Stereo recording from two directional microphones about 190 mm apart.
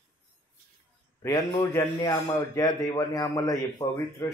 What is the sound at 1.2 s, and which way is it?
A man's voice, 15° left (ahead or behind).